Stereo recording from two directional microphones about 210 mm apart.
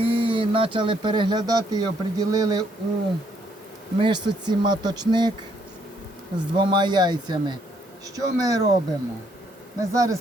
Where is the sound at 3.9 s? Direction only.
20° right (ahead or behind).